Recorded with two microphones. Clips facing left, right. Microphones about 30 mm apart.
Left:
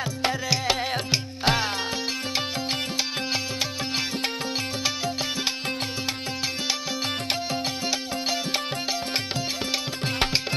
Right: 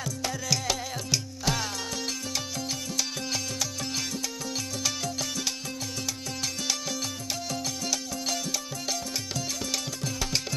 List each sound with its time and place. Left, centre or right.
0.2 s music: left
4.8 s music: left
7.2 s music: left
9.7 s music: left